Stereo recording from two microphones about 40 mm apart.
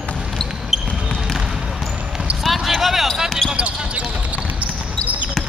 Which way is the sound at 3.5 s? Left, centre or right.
Right.